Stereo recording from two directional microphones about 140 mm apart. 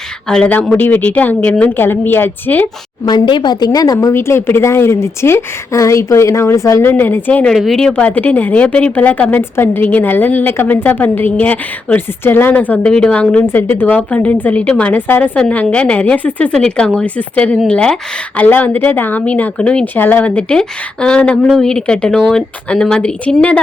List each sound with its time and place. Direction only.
0.3 s speech: 5° left (ahead or behind)
3.1 s a woman's voice: 35° left (ahead or behind); by 7.5 s 10° left (ahead or behind)
7.5 s speech: centre (ahead or behind)